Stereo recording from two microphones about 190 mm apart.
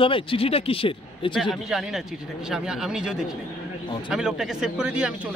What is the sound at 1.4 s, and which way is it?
Speech, centre (ahead or behind).